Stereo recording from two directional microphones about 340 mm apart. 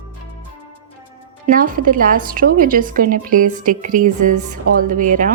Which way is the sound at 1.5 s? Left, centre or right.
Right.